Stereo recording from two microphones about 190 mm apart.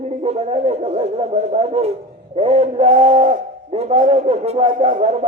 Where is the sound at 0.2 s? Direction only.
35° right (ahead or behind).